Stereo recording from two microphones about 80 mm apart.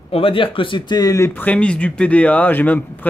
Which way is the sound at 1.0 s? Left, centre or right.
Left.